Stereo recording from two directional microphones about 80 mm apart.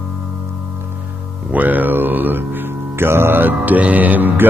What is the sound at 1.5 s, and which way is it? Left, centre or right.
Speech, right.